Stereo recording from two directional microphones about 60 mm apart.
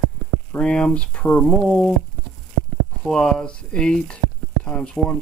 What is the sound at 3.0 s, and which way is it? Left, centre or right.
Speech, centre.